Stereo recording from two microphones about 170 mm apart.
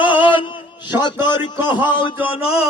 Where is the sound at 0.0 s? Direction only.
30° left (ahead or behind).